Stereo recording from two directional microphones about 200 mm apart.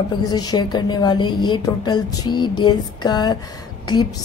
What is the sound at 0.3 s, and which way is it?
A woman's voice, 20° left (ahead or behind).